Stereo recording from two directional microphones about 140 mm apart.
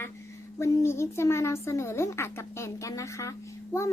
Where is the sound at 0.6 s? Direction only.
20° left (ahead or behind).